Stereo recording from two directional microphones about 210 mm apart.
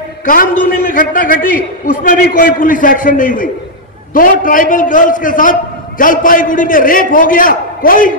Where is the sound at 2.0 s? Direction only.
45° left (ahead or behind).